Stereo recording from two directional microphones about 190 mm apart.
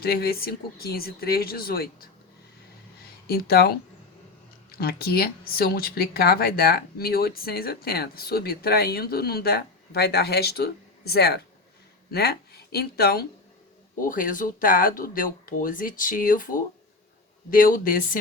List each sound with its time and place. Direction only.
0.0 s speech: 55° left (ahead or behind)
3.2 s speech: 55° left (ahead or behind)
4.8 s speech: 55° left (ahead or behind)